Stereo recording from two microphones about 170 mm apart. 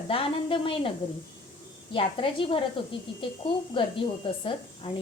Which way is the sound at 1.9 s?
30° left (ahead or behind).